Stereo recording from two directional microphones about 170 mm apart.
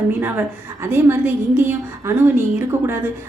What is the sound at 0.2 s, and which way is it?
A woman's voice, 10° right (ahead or behind).